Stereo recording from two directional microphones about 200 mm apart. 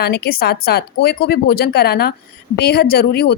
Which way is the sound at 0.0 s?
50° left (ahead or behind).